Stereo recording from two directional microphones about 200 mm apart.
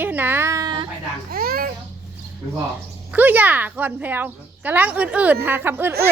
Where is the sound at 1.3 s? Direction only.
50° right (ahead or behind).